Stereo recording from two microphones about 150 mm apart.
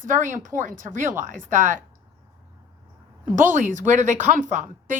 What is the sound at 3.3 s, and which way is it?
A woman's voice, 55° right (ahead or behind).